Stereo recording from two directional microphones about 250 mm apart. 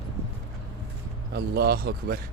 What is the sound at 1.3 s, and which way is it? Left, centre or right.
Speech, right.